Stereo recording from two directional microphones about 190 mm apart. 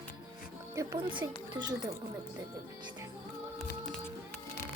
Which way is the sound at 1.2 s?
20° right (ahead or behind).